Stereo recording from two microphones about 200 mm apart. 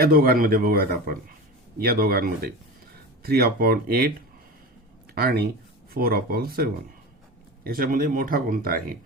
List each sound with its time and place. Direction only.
0.0 s speech: 50° right (ahead or behind)
5.1 s speech: 50° right (ahead or behind)